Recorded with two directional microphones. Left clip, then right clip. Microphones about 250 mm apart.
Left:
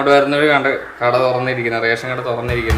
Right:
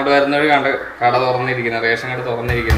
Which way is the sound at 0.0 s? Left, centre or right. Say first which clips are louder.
Left 2 dB; centre.